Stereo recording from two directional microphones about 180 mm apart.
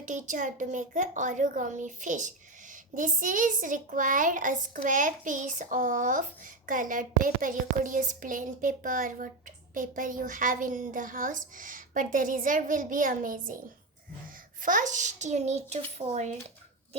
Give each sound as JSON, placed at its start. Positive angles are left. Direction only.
{"t": 0.0, "sound": "a child's voice", "side_deg": -45}
{"t": 14.6, "sound": "a child's voice", "side_deg": -45}